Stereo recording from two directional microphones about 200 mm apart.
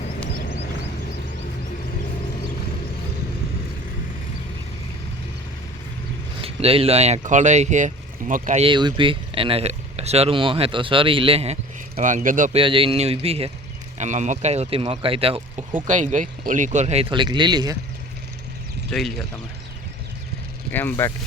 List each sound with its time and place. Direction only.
0.3 s a sound: 55° left (ahead or behind)
6.4 s speech: 30° right (ahead or behind)
8.6 s speech: 25° right (ahead or behind)
11.9 s speech: 40° right (ahead or behind)
12.5 s speech: 25° right (ahead or behind)
15.9 s speech: 40° right (ahead or behind); by 17.7 s 20° right (ahead or behind)
18.9 s speech: centre (ahead or behind)
20.7 s speech: 10° left (ahead or behind)